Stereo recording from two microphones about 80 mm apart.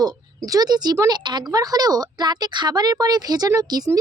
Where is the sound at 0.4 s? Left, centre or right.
Right.